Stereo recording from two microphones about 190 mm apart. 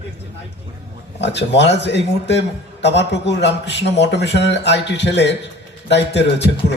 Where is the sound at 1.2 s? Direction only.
65° left (ahead or behind).